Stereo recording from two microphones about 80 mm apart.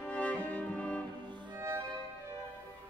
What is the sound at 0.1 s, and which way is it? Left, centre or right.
Music, centre.